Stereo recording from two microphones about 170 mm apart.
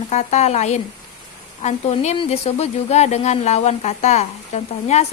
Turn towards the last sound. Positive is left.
turn(degrees=40)  # may be behind; listen again after turning